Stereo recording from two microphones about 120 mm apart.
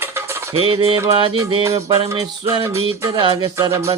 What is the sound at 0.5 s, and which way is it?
Music, 50° right (ahead or behind).